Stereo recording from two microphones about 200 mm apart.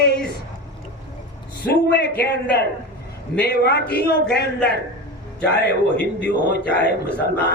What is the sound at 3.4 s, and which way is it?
Speech, 55° left (ahead or behind).